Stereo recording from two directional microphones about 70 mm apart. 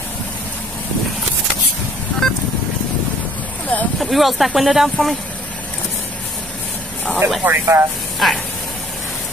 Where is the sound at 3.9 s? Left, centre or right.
Centre.